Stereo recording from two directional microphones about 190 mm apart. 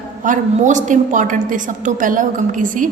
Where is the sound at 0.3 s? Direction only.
40° right (ahead or behind).